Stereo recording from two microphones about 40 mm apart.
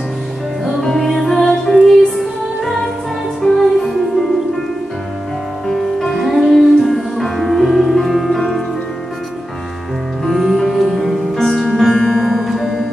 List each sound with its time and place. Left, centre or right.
0.7 s music: centre
1.7 s music: centre
3.4 s music: centre
5.7 s music: centre
10.2 s music: centre